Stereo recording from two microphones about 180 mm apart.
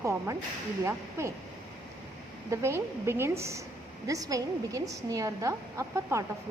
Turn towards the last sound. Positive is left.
turn(degrees=-15)  # may be behind; listen again after turning